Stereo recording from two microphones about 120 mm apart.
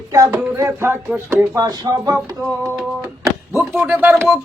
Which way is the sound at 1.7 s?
35° right (ahead or behind).